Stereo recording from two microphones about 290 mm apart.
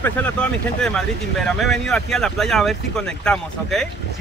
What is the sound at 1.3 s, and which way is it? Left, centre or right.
Speech, centre.